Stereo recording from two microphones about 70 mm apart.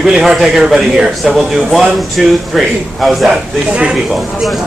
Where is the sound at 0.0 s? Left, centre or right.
Centre.